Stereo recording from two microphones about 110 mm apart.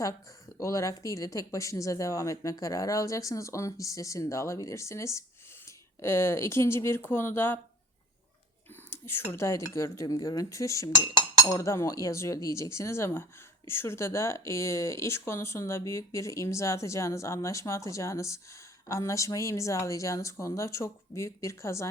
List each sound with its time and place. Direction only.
0.6 s speech: 30° left (ahead or behind)
8.7 s speech: 20° left (ahead or behind)